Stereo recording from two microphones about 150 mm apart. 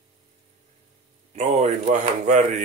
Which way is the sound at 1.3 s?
50° right (ahead or behind).